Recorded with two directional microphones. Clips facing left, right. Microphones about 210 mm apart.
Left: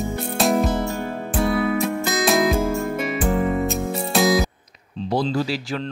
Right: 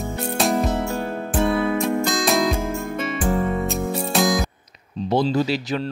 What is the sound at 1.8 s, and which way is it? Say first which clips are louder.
Music: right 1 dB; centre (ahead or behind).